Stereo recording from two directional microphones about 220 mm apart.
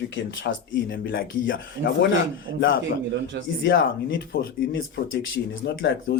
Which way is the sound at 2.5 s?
55° right (ahead or behind).